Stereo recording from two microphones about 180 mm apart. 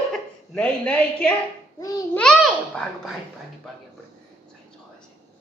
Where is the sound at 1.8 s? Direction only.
20° left (ahead or behind).